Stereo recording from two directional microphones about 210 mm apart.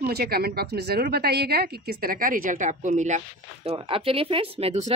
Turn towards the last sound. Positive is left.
turn(degrees=-30)  # may be behind; listen again after turning